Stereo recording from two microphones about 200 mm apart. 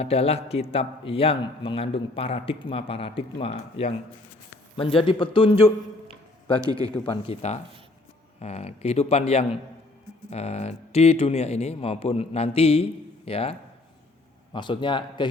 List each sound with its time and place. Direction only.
0.0 s a man's voice: 30° left (ahead or behind)
6.7 s a man's voice: 20° right (ahead or behind)
7.1 s a man's voice: 25° left (ahead or behind)